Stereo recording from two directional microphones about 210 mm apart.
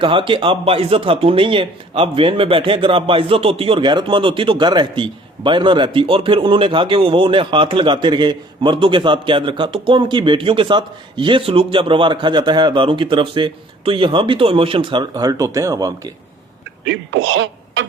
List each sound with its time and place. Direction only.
0.0 s speech: 25° right (ahead or behind)
16.8 s speech: 60° right (ahead or behind)